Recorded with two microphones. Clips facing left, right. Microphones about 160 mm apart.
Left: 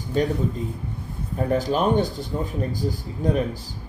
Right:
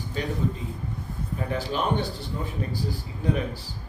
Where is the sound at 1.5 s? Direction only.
45° left (ahead or behind).